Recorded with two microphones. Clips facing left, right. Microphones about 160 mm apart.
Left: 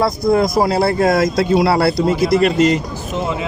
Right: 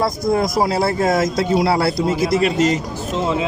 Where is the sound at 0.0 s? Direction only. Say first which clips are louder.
Left 3 dB; 60° left (ahead or behind).